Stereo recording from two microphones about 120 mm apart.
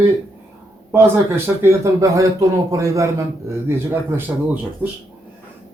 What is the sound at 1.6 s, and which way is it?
A man's voice, 25° right (ahead or behind).